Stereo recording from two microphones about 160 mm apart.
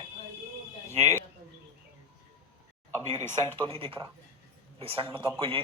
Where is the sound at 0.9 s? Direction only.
20° left (ahead or behind).